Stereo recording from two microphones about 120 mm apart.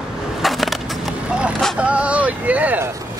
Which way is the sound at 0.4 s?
Centre (ahead or behind).